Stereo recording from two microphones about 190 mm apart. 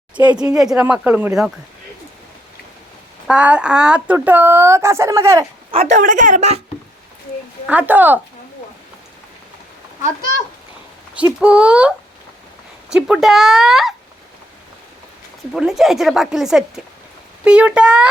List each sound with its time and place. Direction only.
0.3 s speech: 20° right (ahead or behind)
0.6 s speech: 5° right (ahead or behind)
3.2 s speech: 5° right (ahead or behind)
6.0 s a woman's voice: 45° right (ahead or behind)
7.7 s speech: 10° right (ahead or behind)
11.2 s speech: 5° right (ahead or behind)
15.5 s speech: centre (ahead or behind)